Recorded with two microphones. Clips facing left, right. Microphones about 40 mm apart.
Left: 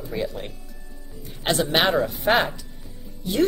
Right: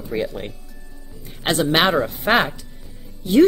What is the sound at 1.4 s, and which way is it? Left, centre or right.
Speech, right.